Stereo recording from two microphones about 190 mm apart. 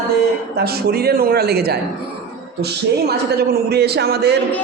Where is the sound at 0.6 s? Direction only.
55° right (ahead or behind).